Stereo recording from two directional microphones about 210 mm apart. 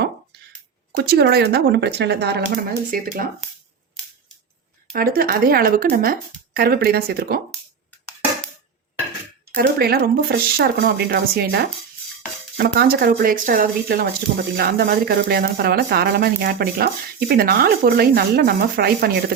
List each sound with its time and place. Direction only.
0.9 s speech: 50° right (ahead or behind)
4.9 s speech: 45° right (ahead or behind)
9.6 s speech: 50° right (ahead or behind)